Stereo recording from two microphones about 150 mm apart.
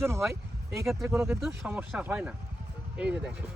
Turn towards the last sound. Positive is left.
turn(degrees=-10)  # may be behind; listen again after turning